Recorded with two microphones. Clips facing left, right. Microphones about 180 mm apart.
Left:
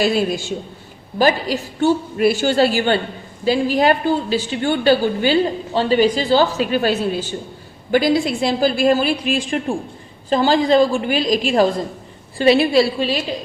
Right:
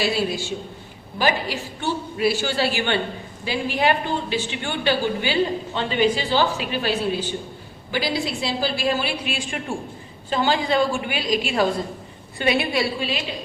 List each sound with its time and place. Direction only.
0.0 s a woman's voice: 50° left (ahead or behind)